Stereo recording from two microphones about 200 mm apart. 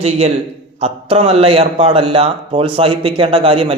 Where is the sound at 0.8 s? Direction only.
30° right (ahead or behind).